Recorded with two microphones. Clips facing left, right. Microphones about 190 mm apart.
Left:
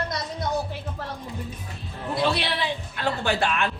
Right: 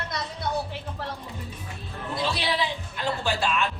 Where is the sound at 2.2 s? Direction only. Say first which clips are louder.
Left 5 dB; 60° left (ahead or behind).